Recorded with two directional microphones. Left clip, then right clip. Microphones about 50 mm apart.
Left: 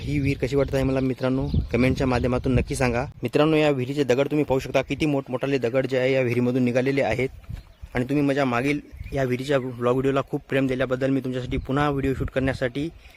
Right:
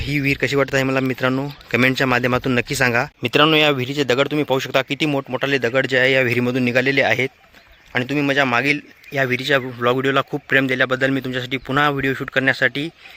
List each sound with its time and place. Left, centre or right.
0.1 s speech: centre
3.6 s speech: centre
6.4 s speech: left
8.1 s a man's voice: left
9.6 s speech: left
10.5 s speech: centre